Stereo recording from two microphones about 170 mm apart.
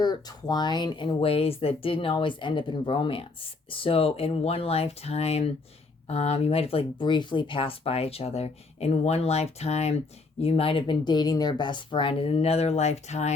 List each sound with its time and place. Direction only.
0.0 s speech: 25° left (ahead or behind); by 13.3 s 40° left (ahead or behind)